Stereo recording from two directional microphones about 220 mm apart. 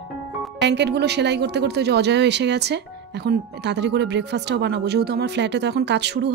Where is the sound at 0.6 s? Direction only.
50° right (ahead or behind).